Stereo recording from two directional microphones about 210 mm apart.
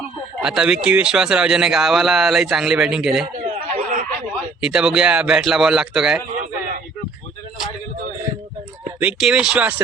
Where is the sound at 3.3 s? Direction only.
35° right (ahead or behind).